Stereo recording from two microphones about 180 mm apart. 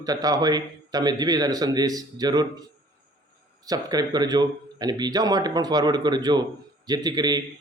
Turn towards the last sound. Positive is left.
turn(degrees=-20)  # may be behind; listen again after turning